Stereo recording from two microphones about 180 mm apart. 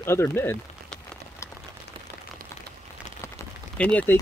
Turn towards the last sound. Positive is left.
turn(degrees=10)  # may be behind; listen again after turning